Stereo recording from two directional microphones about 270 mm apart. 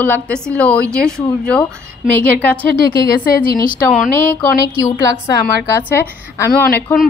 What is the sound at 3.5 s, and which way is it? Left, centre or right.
Speech, left.